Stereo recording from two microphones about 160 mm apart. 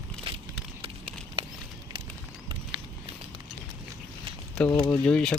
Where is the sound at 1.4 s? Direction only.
35° right (ahead or behind).